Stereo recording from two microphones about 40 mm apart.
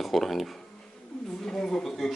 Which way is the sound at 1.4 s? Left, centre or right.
Centre.